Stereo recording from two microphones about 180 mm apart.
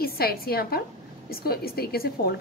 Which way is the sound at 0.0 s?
60° left (ahead or behind).